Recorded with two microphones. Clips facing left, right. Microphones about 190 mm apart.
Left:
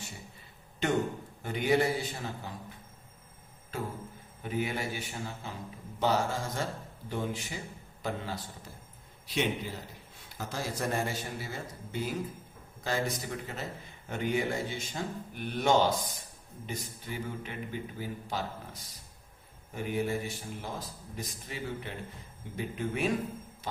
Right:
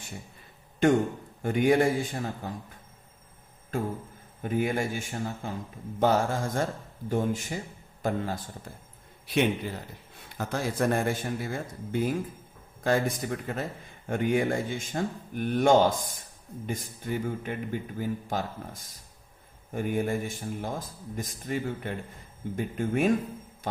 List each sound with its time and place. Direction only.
1.4 s a man's voice: 50° right (ahead or behind)
4.4 s a man's voice: 50° right (ahead or behind)
9.2 s a man's voice: 60° right (ahead or behind)